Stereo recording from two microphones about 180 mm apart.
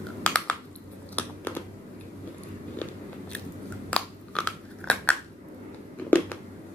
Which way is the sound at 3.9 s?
5° left (ahead or behind).